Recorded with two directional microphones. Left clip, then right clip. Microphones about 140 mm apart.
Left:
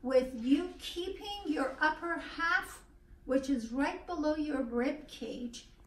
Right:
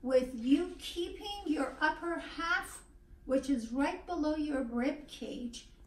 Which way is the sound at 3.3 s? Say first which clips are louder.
Even; centre (ahead or behind).